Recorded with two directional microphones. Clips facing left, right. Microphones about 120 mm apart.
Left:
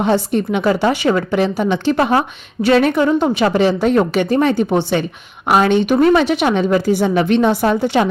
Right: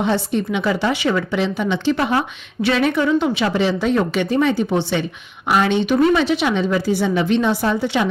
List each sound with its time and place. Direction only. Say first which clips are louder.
0.0 s a woman's voice: left 4 dB; 50° left (ahead or behind)